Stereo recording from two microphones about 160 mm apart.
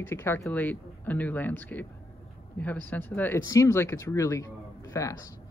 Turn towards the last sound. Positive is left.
turn(degrees=20)  # may be behind; listen again after turning